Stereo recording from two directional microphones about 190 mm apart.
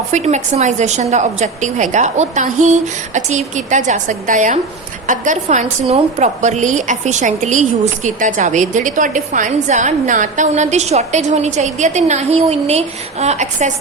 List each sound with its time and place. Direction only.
0.1 s a woman's voice: 35° right (ahead or behind)